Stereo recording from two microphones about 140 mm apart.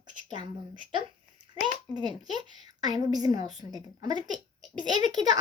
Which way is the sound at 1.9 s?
30° right (ahead or behind).